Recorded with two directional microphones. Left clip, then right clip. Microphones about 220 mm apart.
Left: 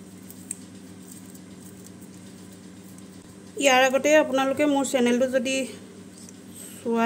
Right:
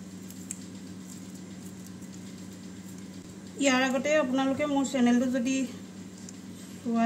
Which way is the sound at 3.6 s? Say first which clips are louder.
Left 7 dB; 50° left (ahead or behind).